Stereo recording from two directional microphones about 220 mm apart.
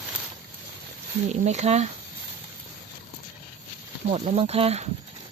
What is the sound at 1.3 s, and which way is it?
Speech, 30° right (ahead or behind).